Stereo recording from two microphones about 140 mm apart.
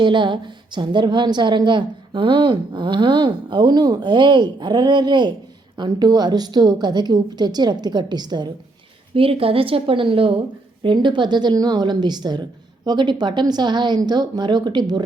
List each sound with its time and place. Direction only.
0.0 s a woman's voice: 35° right (ahead or behind)
9.1 s a woman's voice: 40° right (ahead or behind)